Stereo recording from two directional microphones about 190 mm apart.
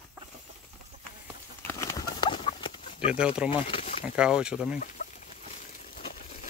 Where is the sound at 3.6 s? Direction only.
30° left (ahead or behind).